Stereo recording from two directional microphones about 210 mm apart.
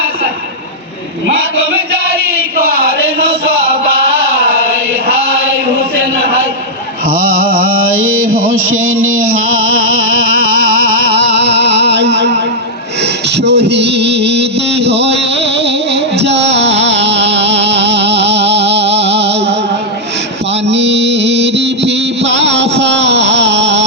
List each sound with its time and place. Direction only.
8.0 s music: 70° right (ahead or behind)
10.8 s music: 50° right (ahead or behind)